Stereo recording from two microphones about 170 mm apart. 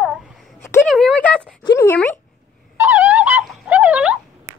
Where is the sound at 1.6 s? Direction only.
25° left (ahead or behind).